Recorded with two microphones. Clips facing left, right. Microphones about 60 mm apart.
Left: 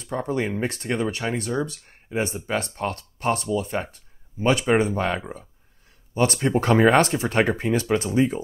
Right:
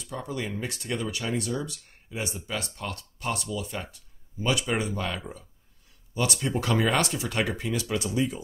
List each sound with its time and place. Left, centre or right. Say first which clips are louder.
0.0 s speech: left 8 dB; left